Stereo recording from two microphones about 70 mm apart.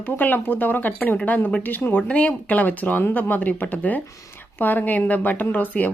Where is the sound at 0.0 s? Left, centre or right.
Left.